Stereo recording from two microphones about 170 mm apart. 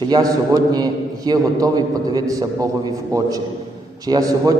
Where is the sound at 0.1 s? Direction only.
25° right (ahead or behind).